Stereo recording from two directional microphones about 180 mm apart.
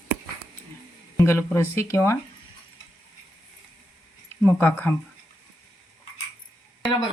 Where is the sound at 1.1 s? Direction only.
15° left (ahead or behind).